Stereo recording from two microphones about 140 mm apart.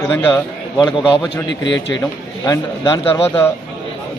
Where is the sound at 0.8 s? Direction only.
35° left (ahead or behind).